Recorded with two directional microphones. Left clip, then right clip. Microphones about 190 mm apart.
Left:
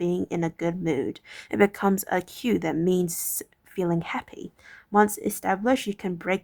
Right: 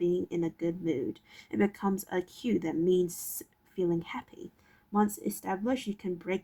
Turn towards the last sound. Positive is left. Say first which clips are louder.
# left 7 dB
turn(degrees=40)  # may be behind; listen again after turning